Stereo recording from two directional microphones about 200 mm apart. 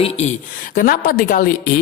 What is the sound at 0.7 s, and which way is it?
Speech, 45° left (ahead or behind).